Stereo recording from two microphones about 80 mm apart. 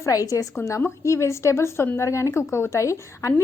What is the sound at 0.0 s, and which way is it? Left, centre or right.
A woman's voice, left.